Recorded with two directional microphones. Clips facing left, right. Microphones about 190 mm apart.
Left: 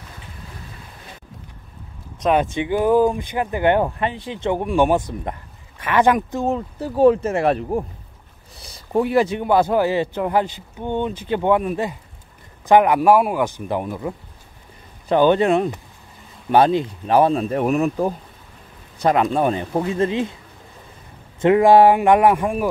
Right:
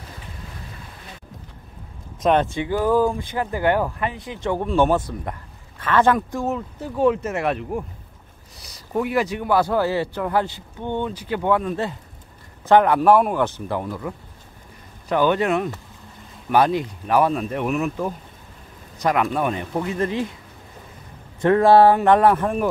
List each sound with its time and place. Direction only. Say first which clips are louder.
2.5 s a man's voice: left 3 dB; 15° left (ahead or behind)
6.4 s a man's voice: left 3 dB; 35° left (ahead or behind)
21.4 s speech: left 2 dB; 15° left (ahead or behind)